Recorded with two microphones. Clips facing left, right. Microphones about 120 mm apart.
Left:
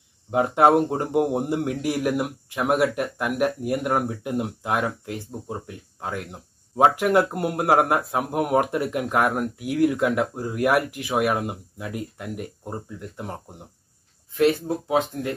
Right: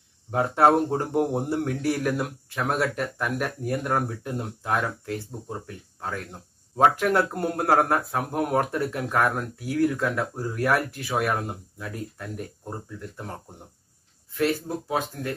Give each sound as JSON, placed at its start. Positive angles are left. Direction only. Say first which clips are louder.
{"t": 0.3, "sound": "speech", "louder": "left 2 dB", "side_deg": 15}